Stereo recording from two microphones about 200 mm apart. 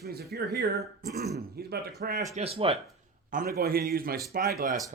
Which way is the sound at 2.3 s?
30° right (ahead or behind).